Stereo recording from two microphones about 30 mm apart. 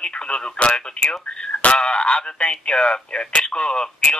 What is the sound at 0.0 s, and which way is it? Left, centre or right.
Speech, left.